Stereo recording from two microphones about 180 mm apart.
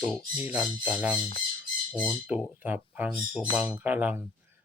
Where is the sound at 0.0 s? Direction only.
5° left (ahead or behind).